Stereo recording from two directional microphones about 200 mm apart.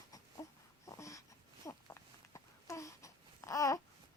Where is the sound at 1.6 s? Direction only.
15° left (ahead or behind).